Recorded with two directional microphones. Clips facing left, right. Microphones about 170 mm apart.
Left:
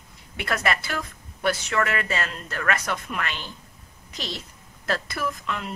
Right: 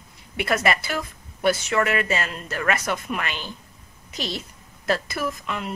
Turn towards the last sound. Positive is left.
turn(degrees=-10)  # may be behind; listen again after turning